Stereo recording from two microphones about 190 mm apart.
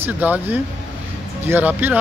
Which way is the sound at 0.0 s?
10° right (ahead or behind).